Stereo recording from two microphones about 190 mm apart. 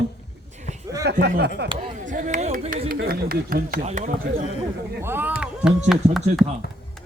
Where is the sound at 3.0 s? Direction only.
50° right (ahead or behind).